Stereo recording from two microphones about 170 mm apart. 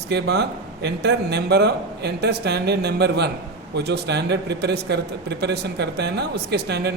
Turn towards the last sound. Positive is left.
turn(degrees=-80)